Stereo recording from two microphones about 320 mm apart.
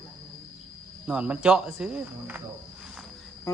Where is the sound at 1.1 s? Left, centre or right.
Centre.